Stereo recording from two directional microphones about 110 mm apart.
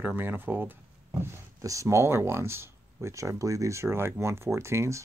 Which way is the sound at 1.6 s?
30° right (ahead or behind).